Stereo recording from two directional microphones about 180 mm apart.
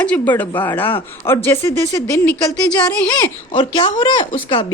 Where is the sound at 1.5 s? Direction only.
15° left (ahead or behind).